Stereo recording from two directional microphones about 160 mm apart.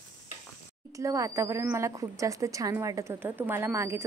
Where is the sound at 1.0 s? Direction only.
20° right (ahead or behind).